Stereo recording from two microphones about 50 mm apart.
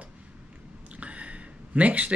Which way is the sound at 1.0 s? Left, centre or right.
Right.